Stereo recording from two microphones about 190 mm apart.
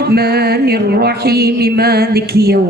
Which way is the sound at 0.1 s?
55° right (ahead or behind).